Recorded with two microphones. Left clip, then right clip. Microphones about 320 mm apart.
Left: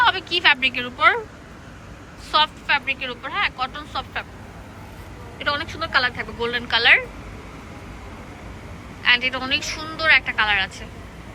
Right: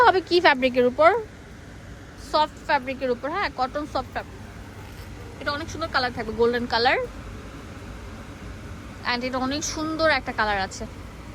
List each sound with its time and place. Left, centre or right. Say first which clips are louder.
0.0 s speech: even; right
2.3 s speech: left 3 dB; centre
5.4 s speech: left 4 dB; centre
9.0 s speech: left 7 dB; centre